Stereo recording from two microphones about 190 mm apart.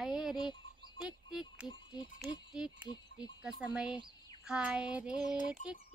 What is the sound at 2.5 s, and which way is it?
Speech, 5° right (ahead or behind).